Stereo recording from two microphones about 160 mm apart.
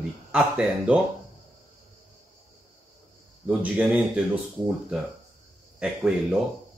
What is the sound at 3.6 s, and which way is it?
Speech, centre (ahead or behind).